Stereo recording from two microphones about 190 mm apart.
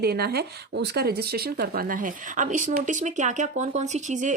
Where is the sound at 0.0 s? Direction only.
55° right (ahead or behind).